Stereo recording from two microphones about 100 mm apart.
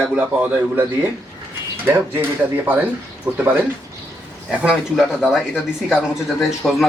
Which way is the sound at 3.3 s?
20° right (ahead or behind).